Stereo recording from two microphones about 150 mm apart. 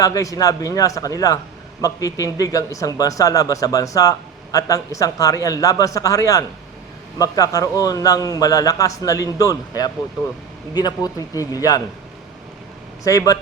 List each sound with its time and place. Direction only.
0.0 s a man's voice: 20° left (ahead or behind)
13.1 s a man's voice: 25° left (ahead or behind)